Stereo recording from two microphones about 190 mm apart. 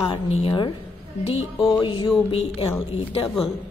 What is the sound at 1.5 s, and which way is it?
Music, centre (ahead or behind).